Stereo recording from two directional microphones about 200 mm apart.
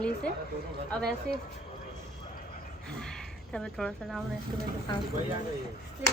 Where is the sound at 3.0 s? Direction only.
5° left (ahead or behind).